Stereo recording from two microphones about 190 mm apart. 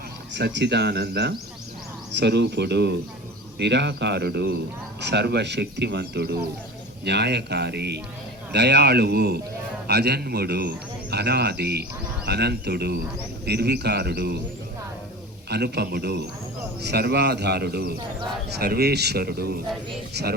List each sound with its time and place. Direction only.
0.3 s a man's voice: 65° right (ahead or behind)
15.4 s a man's voice: 60° right (ahead or behind)